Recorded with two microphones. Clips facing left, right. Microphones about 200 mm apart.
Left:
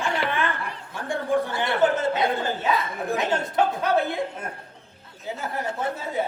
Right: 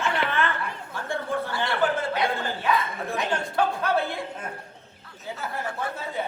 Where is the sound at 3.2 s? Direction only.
20° left (ahead or behind).